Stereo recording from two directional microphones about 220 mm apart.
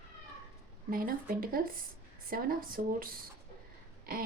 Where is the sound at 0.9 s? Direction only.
40° right (ahead or behind).